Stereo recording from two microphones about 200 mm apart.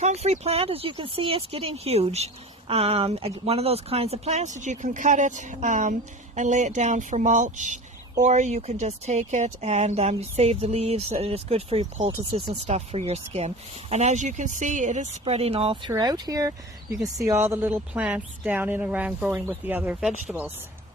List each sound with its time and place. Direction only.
0.0 s speech: 35° right (ahead or behind); by 20.5 s 10° right (ahead or behind)